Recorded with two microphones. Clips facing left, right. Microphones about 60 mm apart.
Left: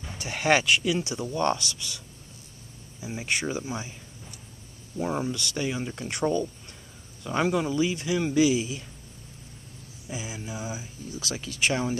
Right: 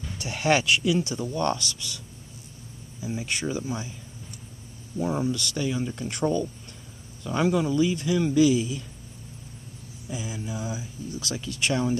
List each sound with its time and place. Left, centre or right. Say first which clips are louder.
0.0 s speech: right 1 dB; centre
3.0 s speech: even; left
5.0 s speech: right 2 dB; left
10.0 s speech: right 2 dB; centre